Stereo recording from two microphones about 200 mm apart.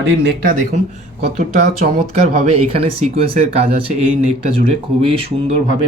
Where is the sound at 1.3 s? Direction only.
35° right (ahead or behind).